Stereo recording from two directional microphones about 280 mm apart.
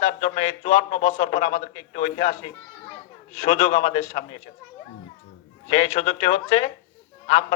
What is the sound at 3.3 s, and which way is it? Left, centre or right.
A man's voice, left.